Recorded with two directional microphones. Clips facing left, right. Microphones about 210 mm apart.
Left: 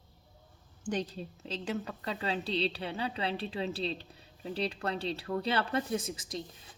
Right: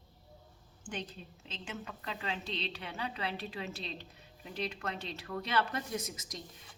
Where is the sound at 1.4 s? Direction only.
35° left (ahead or behind).